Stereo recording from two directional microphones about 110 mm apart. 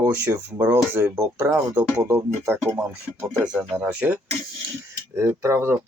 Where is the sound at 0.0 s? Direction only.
25° right (ahead or behind).